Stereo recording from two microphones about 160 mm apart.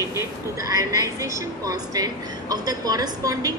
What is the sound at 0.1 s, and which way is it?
A woman's voice, 20° right (ahead or behind).